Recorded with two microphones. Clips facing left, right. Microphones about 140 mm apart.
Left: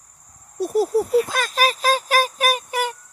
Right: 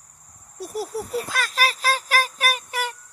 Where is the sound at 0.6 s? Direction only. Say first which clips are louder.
Left 10 dB; 25° left (ahead or behind).